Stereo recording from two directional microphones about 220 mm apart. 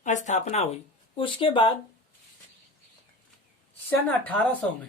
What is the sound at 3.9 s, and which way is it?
Speech, 10° left (ahead or behind).